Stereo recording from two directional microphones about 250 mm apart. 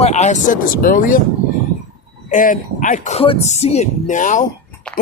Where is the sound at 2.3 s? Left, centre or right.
Left.